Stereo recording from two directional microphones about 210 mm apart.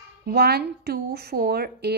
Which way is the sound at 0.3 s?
50° right (ahead or behind).